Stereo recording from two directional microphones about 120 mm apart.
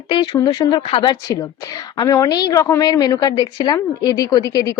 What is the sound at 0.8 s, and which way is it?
Speech, 45° left (ahead or behind).